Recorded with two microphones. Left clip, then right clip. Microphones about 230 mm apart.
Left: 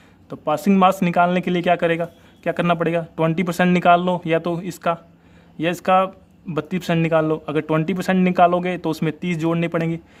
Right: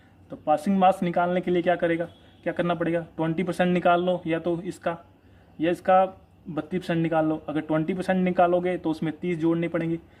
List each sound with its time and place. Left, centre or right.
0.3 s a man's voice: left